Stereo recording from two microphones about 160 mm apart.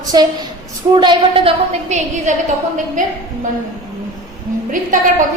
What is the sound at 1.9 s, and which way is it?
Speech, 45° right (ahead or behind).